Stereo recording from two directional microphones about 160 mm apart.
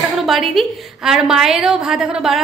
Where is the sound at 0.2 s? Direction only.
Centre (ahead or behind).